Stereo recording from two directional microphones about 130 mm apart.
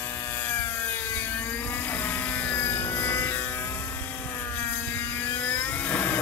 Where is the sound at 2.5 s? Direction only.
15° left (ahead or behind).